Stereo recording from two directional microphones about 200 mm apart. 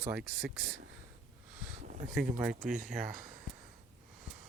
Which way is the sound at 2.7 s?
45° right (ahead or behind).